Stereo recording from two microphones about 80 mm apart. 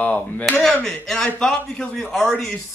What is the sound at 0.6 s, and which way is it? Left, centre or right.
Speech, centre.